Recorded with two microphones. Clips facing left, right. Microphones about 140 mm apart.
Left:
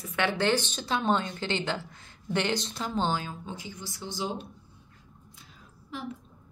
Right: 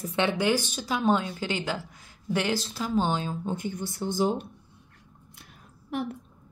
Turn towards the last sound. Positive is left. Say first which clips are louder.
# right 7 dB
turn(degrees=-60)  # may be behind; listen again after turning